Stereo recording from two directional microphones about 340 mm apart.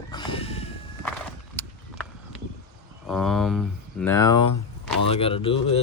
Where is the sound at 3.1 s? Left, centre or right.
Centre.